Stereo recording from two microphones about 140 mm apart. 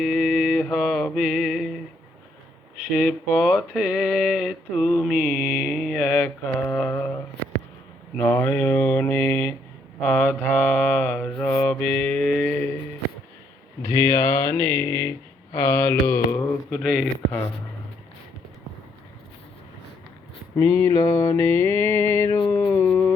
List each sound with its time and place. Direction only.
0.0 s music: centre (ahead or behind)
2.9 s mantra: 5° left (ahead or behind)
8.2 s mantra: 15° left (ahead or behind)
13.8 s mantra: 20° left (ahead or behind)
16.7 s mantra: centre (ahead or behind)
20.6 s mantra: 20° left (ahead or behind)